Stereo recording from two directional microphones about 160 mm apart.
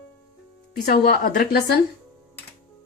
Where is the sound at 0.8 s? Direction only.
65° left (ahead or behind).